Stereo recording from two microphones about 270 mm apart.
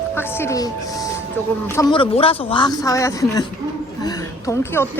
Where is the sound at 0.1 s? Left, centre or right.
Centre.